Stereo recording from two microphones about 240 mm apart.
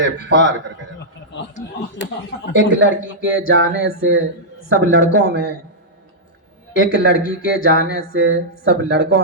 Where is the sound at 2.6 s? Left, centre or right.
Left.